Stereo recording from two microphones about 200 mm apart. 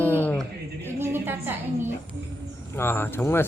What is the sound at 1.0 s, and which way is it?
Speech, 10° right (ahead or behind).